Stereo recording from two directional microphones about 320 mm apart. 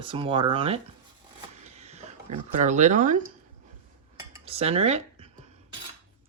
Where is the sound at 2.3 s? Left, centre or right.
Right.